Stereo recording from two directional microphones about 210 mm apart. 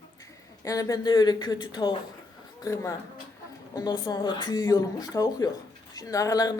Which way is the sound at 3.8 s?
20° left (ahead or behind).